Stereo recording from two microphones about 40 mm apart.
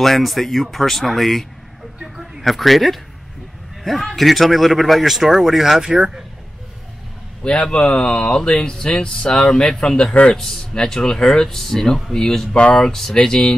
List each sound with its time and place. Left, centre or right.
0.0 s speech: centre
2.4 s speech: centre
7.4 s a man's voice: left